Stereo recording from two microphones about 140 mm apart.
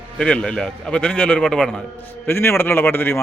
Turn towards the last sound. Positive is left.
turn(degrees=15)  # may be behind; listen again after turning